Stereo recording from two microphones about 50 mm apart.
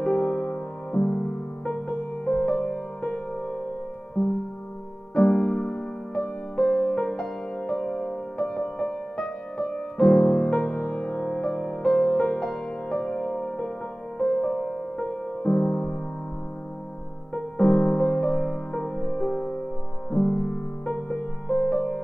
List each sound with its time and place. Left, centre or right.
0.0 s music: centre
2.4 s music: centre
4.2 s music: centre
5.1 s music: centre
10.6 s music: left
11.0 s music: centre
11.8 s music: centre
12.9 s music: centre
17.3 s music: centre
21.1 s music: centre
21.6 s music: centre